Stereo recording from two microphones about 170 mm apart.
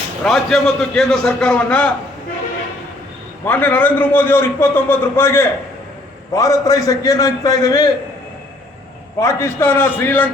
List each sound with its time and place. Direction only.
0.3 s a man's voice: centre (ahead or behind)
3.4 s a man's voice: 10° left (ahead or behind)
9.1 s a man's voice: 15° left (ahead or behind)